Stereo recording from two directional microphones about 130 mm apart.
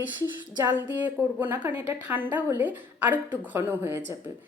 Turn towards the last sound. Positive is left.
turn(degrees=-20)  # may be behind; listen again after turning